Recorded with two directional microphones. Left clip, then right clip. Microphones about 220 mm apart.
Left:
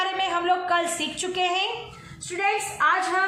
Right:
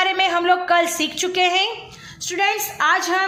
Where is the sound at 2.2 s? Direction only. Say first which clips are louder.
Right 4 dB; 45° right (ahead or behind).